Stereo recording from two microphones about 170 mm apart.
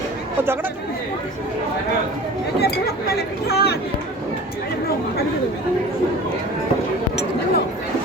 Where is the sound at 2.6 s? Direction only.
70° left (ahead or behind).